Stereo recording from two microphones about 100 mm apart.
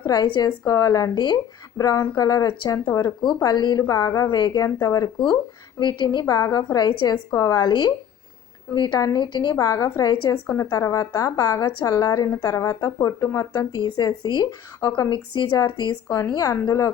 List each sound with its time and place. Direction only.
0.0 s a woman's voice: 40° left (ahead or behind)
0.6 s a woman's voice: 35° left (ahead or behind)
3.2 s a woman's voice: 50° left (ahead or behind)
7.7 s a woman's voice: 50° left (ahead or behind)
9.6 s a woman's voice: 35° left (ahead or behind)
10.3 s a woman's voice: 15° left (ahead or behind)
10.7 s a woman's voice: 35° left (ahead or behind)
15.1 s a woman's voice: 50° left (ahead or behind)